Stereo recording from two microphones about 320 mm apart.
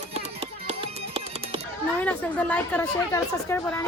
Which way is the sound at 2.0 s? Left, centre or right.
Centre.